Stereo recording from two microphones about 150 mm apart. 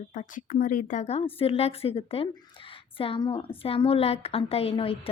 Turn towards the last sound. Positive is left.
turn(degrees=40)  # may be behind; listen again after turning